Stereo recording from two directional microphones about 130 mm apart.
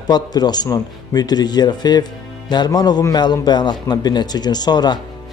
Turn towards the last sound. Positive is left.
turn(degrees=30)  # may be behind; listen again after turning